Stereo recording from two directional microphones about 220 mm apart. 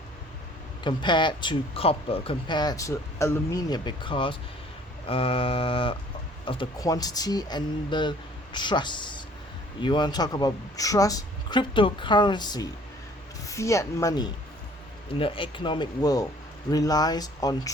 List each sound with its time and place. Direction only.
0.9 s speech: 20° left (ahead or behind)